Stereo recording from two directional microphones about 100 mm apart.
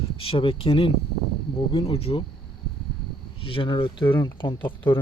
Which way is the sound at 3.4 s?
60° left (ahead or behind).